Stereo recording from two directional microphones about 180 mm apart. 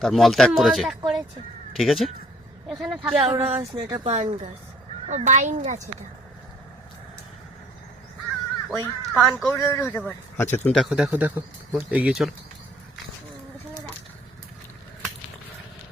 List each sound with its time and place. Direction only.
0.0 s speech: centre (ahead or behind)
3.2 s speech: 30° right (ahead or behind)
8.7 s speech: 15° left (ahead or behind)
9.2 s speech: centre (ahead or behind)
9.6 s speech: 15° left (ahead or behind); by 12.3 s 5° right (ahead or behind)